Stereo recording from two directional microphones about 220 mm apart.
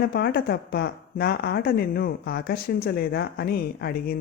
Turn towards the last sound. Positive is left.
turn(degrees=45)  # may be behind; listen again after turning